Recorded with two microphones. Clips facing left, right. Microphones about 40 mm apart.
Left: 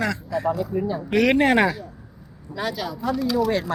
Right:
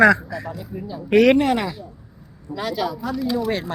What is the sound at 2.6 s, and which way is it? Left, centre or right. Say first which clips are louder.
Speech: right 2 dB; centre.